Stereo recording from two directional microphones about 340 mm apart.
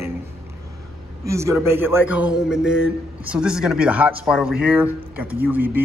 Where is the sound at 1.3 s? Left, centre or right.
Centre.